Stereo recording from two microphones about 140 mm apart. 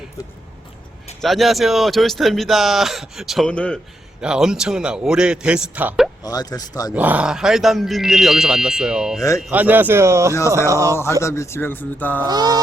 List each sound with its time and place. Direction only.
1.2 s speech: centre (ahead or behind)
4.2 s speech: 5° right (ahead or behind)
6.2 s speech: 25° left (ahead or behind)
6.9 s speech: 10° right (ahead or behind)
10.7 s mantra: 20° right (ahead or behind)
11.2 s speech: 20° left (ahead or behind)
12.2 s mantra: 25° right (ahead or behind)